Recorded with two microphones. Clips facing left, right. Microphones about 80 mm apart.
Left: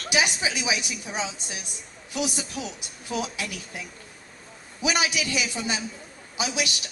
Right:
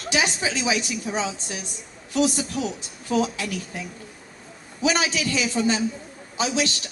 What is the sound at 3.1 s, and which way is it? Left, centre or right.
Speech, centre.